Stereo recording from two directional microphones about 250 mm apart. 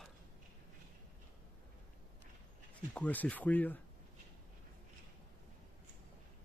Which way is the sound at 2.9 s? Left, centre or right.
Centre.